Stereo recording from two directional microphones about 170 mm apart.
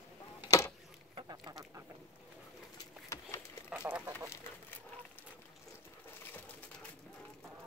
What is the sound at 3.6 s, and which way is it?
Duck, 5° right (ahead or behind).